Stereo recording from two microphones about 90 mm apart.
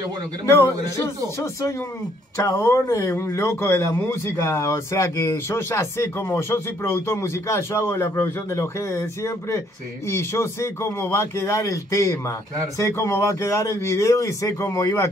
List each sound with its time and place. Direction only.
0.5 s a man's voice: 30° left (ahead or behind)